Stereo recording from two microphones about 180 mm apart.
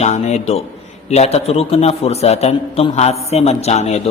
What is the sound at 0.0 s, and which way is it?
A man's voice, 40° left (ahead or behind).